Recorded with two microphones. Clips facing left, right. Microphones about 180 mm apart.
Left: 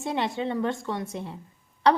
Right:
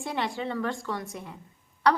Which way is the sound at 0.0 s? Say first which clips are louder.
Left 3 dB; 25° left (ahead or behind).